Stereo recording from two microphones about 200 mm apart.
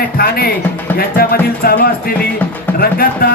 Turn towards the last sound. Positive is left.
turn(degrees=50)  # may be behind; listen again after turning